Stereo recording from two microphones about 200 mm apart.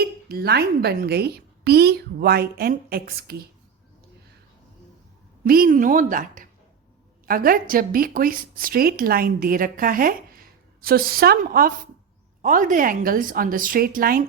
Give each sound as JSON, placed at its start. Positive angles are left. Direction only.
{"t": 0.0, "sound": "speech", "side_deg": -50}
{"t": 5.5, "sound": "speech", "side_deg": -45}